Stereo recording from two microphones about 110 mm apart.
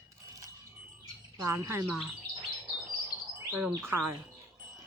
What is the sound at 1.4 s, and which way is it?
Speech, 25° right (ahead or behind).